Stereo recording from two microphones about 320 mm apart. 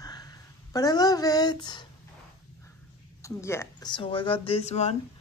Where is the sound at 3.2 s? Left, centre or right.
Centre.